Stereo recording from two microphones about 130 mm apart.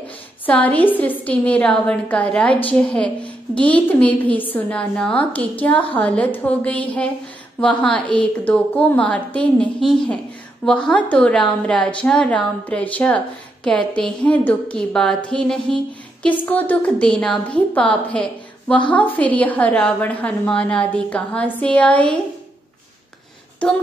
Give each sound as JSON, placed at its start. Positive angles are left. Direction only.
{"t": 0.5, "sound": "a woman's voice", "side_deg": 10}